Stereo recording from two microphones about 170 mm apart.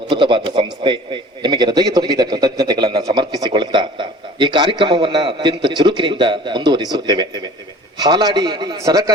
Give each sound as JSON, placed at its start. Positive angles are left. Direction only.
{"t": 0.1, "sound": "a man's voice", "side_deg": -30}